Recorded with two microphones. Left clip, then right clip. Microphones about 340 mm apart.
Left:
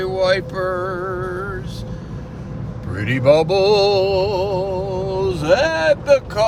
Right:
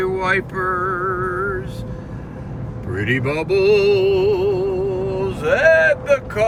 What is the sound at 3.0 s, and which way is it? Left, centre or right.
Music, centre.